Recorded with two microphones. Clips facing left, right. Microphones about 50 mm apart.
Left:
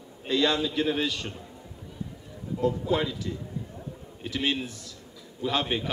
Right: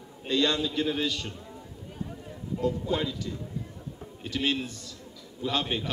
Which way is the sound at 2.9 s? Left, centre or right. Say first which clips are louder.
Left 2 dB; centre.